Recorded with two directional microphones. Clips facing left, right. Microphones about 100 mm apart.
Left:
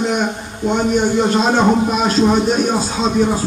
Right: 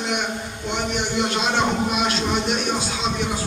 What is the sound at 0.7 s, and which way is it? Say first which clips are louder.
A man's voice: left 9 dB; 40° left (ahead or behind).